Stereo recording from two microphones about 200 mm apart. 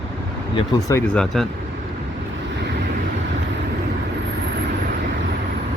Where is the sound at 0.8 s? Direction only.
10° left (ahead or behind).